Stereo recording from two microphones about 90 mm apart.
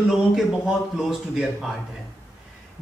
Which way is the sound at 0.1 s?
5° right (ahead or behind).